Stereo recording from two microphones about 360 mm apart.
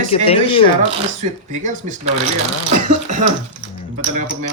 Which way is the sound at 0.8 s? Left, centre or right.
Centre.